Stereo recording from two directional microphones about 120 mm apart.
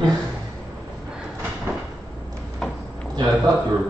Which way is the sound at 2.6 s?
5° left (ahead or behind).